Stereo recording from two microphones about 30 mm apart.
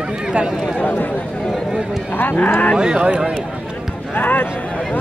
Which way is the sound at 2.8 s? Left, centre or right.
Right.